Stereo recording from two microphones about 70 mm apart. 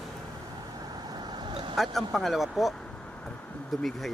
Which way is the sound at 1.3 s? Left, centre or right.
Right.